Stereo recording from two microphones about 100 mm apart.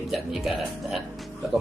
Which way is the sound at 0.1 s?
5° right (ahead or behind).